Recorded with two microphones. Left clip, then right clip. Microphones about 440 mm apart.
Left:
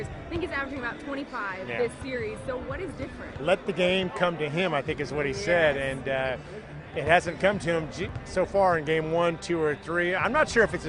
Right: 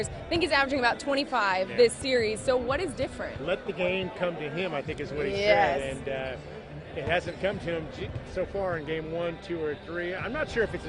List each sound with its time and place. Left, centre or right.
0.3 s a woman's voice: right
3.4 s a man's voice: left